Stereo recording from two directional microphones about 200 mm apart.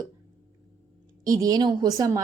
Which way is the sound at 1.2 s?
20° right (ahead or behind).